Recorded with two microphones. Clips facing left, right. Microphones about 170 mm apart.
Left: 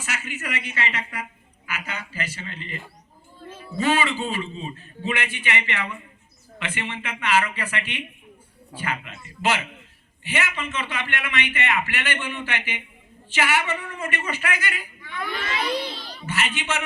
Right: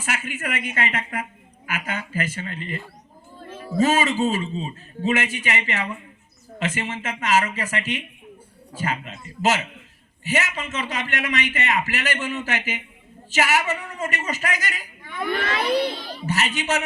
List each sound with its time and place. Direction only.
0.0 s a woman's voice: 50° right (ahead or behind)
3.8 s a man's voice: 40° right (ahead or behind)
15.3 s speech: 55° right (ahead or behind)
16.2 s a man's voice: 40° right (ahead or behind)